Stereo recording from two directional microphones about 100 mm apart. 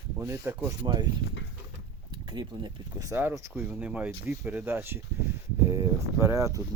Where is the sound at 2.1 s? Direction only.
50° right (ahead or behind).